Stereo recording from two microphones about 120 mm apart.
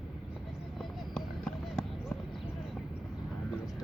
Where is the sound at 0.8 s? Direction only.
5° left (ahead or behind).